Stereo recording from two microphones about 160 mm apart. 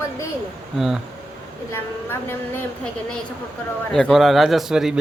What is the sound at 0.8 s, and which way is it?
Speech, 5° right (ahead or behind).